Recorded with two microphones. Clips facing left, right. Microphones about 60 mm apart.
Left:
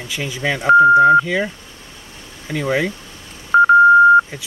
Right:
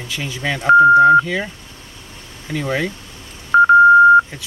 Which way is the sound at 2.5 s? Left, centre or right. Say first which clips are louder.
Left 2 dB; centre.